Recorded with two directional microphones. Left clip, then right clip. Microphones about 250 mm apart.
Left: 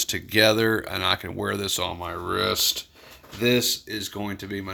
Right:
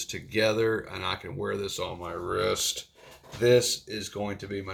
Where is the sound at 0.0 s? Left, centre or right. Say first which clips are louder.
Left 7 dB; left.